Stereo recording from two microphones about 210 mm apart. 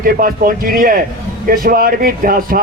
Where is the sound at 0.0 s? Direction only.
45° right (ahead or behind).